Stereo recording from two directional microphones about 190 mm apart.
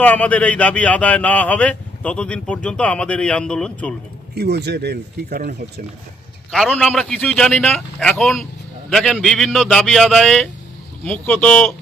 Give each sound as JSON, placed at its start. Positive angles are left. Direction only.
{"t": 0.0, "sound": "speech", "side_deg": 10}
{"t": 4.4, "sound": "speech", "side_deg": -60}
{"t": 6.5, "sound": "a man's voice", "side_deg": 5}